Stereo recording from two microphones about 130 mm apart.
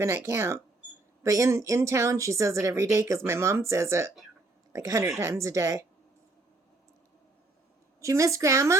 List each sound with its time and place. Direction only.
0.0 s speech: 20° right (ahead or behind)
8.0 s speech: 25° right (ahead or behind)